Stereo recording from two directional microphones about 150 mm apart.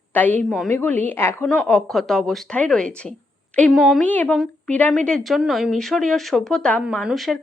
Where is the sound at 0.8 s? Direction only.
10° left (ahead or behind).